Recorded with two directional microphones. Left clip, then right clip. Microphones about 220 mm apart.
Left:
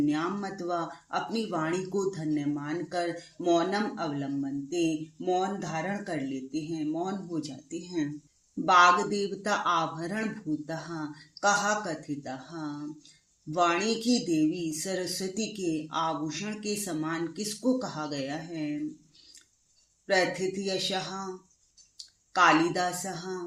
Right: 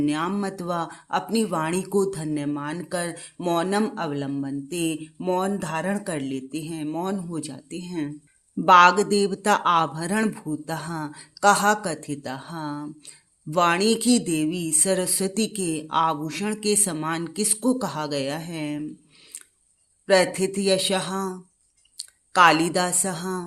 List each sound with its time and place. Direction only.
0.0 s speech: 45° right (ahead or behind)
8.6 s speech: 45° right (ahead or behind)
20.1 s speech: 45° right (ahead or behind)